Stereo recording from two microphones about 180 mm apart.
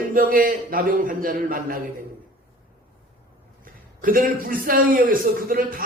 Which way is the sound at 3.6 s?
50° right (ahead or behind).